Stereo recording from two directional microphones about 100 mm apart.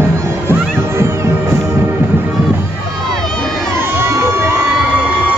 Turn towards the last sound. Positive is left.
turn(degrees=-25)  # may be behind; listen again after turning